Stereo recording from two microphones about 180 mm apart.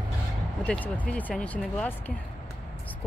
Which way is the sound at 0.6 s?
10° left (ahead or behind).